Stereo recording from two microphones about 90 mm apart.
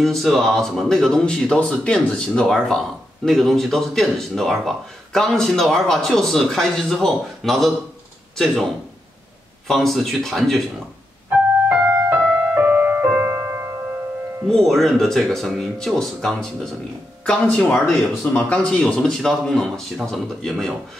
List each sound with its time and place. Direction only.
0.0 s speech: centre (ahead or behind)
9.7 s speech: centre (ahead or behind)
11.2 s keyboard: 20° right (ahead or behind)
11.9 s music: 15° right (ahead or behind)
14.5 s speech: centre (ahead or behind)